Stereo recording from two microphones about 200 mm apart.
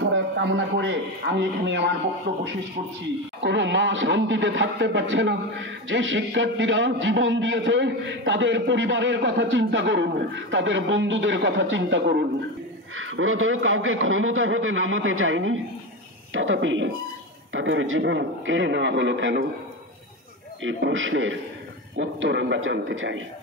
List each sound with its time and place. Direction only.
0.0 s a man's voice: 65° right (ahead or behind)
12.9 s a man's voice: 90° right; by 19.4 s 65° right (ahead or behind)
20.6 s a man's voice: 70° right (ahead or behind)